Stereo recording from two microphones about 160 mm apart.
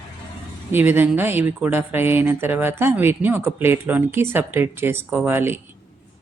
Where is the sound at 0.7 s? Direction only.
10° right (ahead or behind).